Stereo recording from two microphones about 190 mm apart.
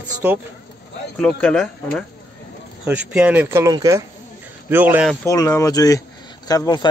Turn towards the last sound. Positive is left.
turn(degrees=20)  # may be behind; listen again after turning